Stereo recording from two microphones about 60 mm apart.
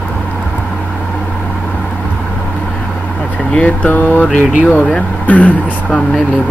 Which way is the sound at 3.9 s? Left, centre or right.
Left.